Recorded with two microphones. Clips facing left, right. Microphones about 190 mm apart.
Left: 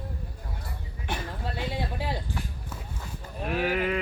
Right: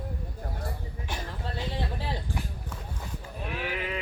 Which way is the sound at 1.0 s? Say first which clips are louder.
Left 4 dB; 60° left (ahead or behind).